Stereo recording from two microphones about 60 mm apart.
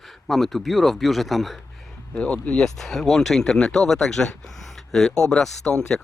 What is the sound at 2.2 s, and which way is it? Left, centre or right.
Speech, centre.